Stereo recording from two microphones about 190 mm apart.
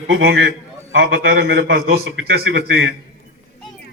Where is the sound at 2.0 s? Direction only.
65° right (ahead or behind).